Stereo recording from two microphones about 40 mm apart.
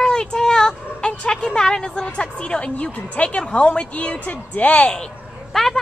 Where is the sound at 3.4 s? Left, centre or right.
Left.